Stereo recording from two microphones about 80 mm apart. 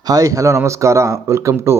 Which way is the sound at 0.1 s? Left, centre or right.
Right.